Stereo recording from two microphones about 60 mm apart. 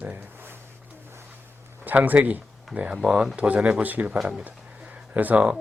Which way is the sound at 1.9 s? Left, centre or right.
Right.